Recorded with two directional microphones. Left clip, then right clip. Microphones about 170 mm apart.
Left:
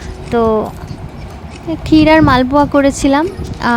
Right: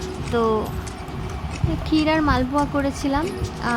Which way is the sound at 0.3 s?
40° left (ahead or behind).